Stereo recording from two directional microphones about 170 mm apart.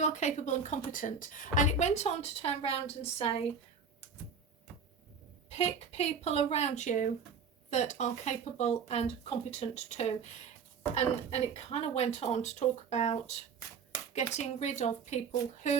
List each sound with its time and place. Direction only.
0.0 s a woman's voice: 45° left (ahead or behind)
5.5 s a woman's voice: 40° left (ahead or behind)